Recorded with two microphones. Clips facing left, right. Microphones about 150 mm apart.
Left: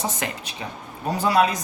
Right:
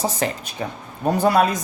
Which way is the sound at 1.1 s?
50° right (ahead or behind).